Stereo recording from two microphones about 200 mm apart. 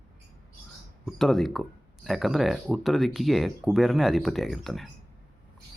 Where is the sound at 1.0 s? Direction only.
Centre (ahead or behind).